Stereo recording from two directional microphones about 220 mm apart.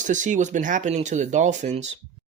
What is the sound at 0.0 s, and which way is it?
Speech, 35° right (ahead or behind).